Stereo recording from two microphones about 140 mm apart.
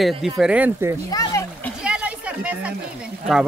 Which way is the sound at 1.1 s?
25° left (ahead or behind).